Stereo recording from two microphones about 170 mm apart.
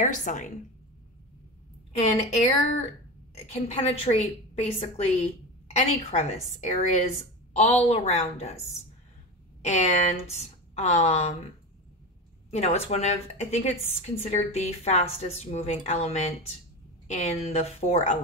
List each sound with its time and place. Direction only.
0.0 s a woman's voice: 45° left (ahead or behind)
2.0 s a woman's voice: 35° left (ahead or behind)
12.4 s a sound: 40° left (ahead or behind)
12.8 s a woman's voice: 40° left (ahead or behind)